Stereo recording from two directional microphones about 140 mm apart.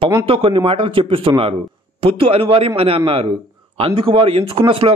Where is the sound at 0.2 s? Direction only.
40° right (ahead or behind).